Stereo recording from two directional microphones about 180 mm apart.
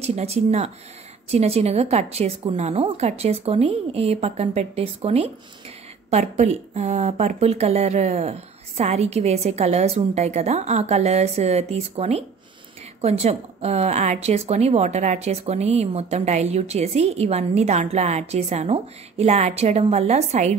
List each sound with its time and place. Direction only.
0.0 s a woman's voice: 35° right (ahead or behind)